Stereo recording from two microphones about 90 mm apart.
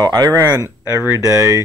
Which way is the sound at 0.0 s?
50° right (ahead or behind).